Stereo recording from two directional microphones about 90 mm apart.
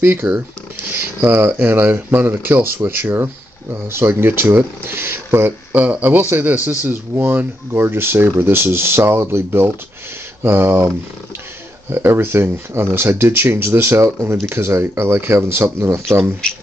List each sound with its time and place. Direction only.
0.0 s speech: 30° right (ahead or behind)
11.9 s speech: 25° right (ahead or behind)